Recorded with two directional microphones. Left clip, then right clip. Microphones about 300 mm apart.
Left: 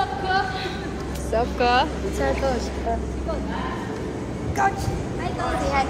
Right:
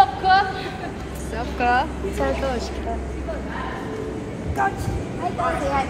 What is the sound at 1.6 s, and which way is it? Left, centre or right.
Speech, centre.